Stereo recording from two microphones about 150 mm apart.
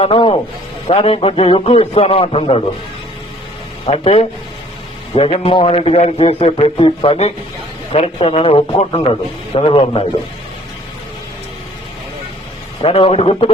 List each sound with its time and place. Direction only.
0.0 s a man's voice: 35° left (ahead or behind)
3.8 s a man's voice: 40° left (ahead or behind)
12.8 s a man's voice: 40° left (ahead or behind)